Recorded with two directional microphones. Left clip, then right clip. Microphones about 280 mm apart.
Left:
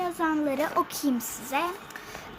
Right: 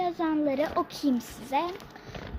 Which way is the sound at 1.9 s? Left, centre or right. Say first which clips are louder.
Left 6 dB; centre.